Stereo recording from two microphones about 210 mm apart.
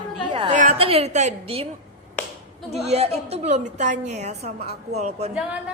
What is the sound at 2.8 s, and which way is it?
A woman's voice, 30° right (ahead or behind).